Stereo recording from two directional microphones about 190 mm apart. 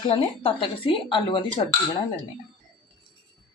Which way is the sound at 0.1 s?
30° left (ahead or behind).